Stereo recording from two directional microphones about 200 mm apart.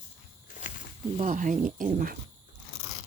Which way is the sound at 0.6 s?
40° left (ahead or behind).